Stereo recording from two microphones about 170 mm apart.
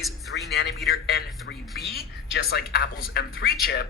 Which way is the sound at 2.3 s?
65° left (ahead or behind).